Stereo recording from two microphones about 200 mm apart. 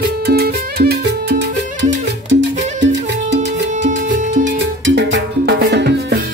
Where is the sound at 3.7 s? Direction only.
35° right (ahead or behind).